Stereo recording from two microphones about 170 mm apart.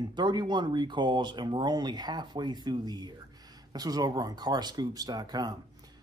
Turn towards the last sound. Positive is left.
turn(degrees=-25)  # may be behind; listen again after turning